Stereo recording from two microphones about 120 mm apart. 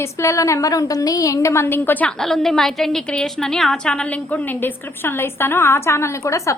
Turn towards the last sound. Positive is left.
turn(degrees=25)  # may be behind; listen again after turning